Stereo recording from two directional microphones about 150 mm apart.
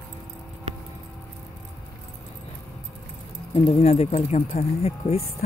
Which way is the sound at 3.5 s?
40° left (ahead or behind).